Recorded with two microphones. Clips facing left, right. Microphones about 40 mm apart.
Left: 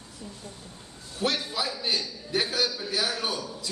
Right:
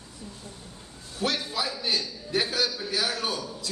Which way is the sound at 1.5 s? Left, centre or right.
Centre.